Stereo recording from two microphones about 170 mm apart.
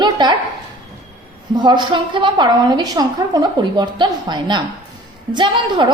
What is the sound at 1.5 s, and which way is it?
A woman's voice, 25° right (ahead or behind).